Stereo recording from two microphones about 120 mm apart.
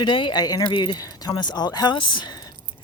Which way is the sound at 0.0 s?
40° left (ahead or behind).